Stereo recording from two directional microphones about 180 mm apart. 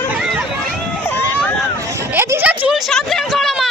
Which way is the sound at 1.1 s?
10° left (ahead or behind).